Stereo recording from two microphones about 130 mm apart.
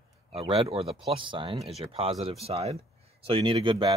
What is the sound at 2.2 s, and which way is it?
Speech, 50° right (ahead or behind).